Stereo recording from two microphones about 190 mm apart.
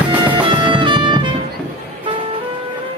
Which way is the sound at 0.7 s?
25° right (ahead or behind).